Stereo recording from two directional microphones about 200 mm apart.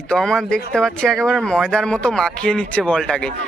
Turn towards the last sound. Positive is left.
turn(degrees=5)  # may be behind; listen again after turning